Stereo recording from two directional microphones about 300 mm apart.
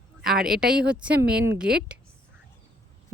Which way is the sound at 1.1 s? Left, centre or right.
Right.